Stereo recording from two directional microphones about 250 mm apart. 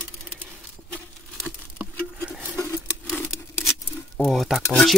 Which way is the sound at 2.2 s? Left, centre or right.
Centre.